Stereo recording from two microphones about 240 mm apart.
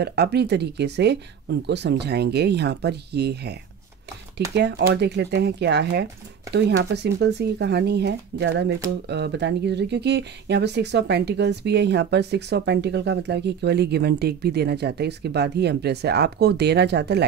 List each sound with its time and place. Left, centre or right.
0.0 s speech: right
4.6 s speech: right